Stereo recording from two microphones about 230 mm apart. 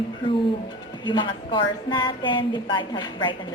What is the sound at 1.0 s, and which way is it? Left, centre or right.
A woman's voice, left.